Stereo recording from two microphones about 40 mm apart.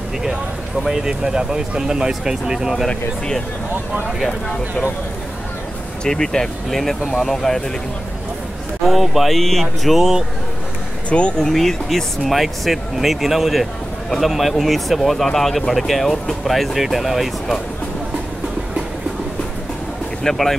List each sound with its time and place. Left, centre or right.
0.8 s speech: centre
6.0 s speech: centre
8.8 s speech: centre
11.1 s speech: left
11.3 s speech: centre
20.2 s speech: centre